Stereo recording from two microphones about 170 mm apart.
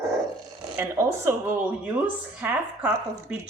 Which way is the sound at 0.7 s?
15° right (ahead or behind).